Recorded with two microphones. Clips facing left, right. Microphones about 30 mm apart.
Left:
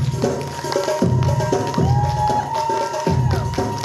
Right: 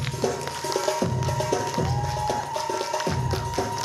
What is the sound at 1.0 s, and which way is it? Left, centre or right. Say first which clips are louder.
Music: left 6 dB; centre.